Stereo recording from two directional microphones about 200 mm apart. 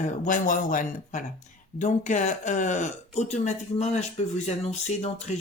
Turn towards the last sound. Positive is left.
turn(degrees=35)  # may be behind; listen again after turning